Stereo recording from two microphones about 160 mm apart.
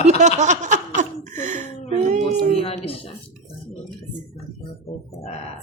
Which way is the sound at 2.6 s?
35° left (ahead or behind).